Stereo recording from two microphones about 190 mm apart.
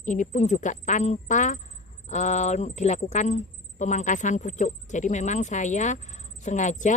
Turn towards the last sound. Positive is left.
turn(degrees=40)  # may be behind; listen again after turning